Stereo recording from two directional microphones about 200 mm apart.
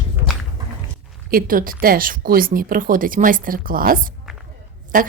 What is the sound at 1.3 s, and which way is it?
A woman's voice, 45° right (ahead or behind).